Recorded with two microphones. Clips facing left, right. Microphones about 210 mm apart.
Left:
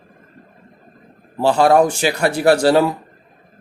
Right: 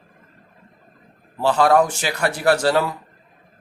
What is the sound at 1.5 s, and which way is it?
Speech, 30° left (ahead or behind).